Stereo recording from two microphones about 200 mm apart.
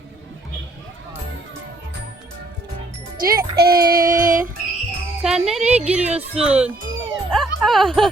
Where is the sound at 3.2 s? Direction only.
45° right (ahead or behind).